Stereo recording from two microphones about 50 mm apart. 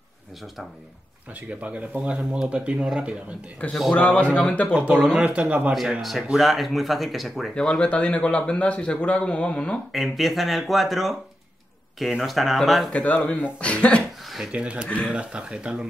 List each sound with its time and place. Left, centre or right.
1.3 s speech: right
3.6 s a man's voice: left
4.7 s speech: right
5.7 s speech: centre
7.8 s a man's voice: left
9.9 s speech: centre
12.9 s a man's voice: left
14.2 s a sound: centre
14.5 s speech: right